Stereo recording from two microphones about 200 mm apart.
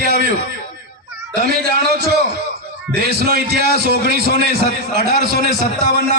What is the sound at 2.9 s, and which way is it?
A man's voice, 55° right (ahead or behind).